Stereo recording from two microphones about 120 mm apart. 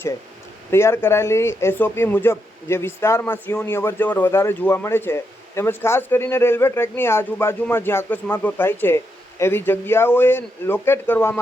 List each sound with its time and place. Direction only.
0.7 s speech: 20° left (ahead or behind)